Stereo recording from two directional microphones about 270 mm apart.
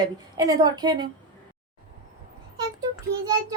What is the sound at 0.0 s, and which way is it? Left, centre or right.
A woman's voice, centre.